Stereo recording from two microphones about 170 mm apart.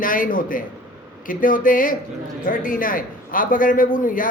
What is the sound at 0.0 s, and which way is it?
A man's voice, 55° left (ahead or behind).